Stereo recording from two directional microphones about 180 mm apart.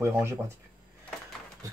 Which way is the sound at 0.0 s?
15° right (ahead or behind).